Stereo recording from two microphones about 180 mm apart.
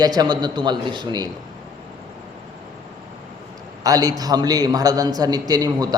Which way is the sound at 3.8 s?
20° right (ahead or behind).